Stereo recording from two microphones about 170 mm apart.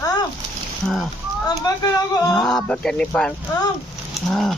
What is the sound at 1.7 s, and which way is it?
Speech, 25° left (ahead or behind).